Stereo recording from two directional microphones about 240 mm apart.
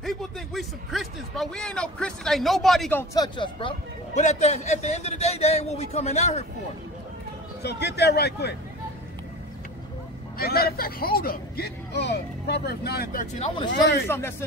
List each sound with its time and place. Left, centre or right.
0.0 s a man's voice: centre
3.3 s speech: left
7.6 s a man's voice: left
10.3 s speech: left
14.0 s speech: centre